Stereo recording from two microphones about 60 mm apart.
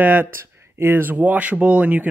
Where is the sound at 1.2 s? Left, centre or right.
Right.